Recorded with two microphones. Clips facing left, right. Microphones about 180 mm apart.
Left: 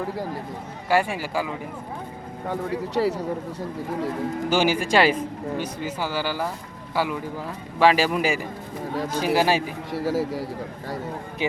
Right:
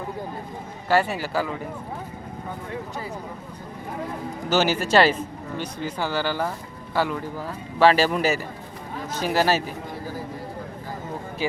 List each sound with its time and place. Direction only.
0.9 s speech: 10° left (ahead or behind)
2.5 s speech: 75° left (ahead or behind)
4.4 s speech: 10° left (ahead or behind)
9.9 s a man's voice: 85° left